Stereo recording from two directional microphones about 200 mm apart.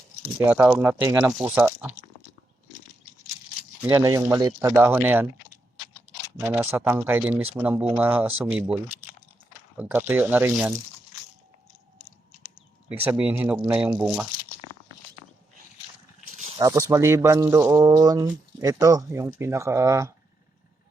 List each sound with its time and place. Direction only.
0.4 s speech: 5° right (ahead or behind)
3.8 s speech: 15° right (ahead or behind)
12.4 s a sound: 5° right (ahead or behind)
13.1 s speech: 5° right (ahead or behind)
16.6 s speech: 15° right (ahead or behind)